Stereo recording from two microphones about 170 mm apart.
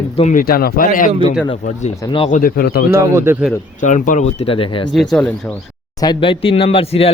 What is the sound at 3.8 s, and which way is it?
Speech, 50° left (ahead or behind).